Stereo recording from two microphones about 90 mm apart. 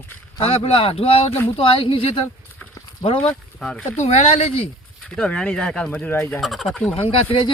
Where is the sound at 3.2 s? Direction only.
10° left (ahead or behind).